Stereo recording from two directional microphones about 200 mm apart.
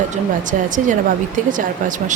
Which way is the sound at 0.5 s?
40° right (ahead or behind).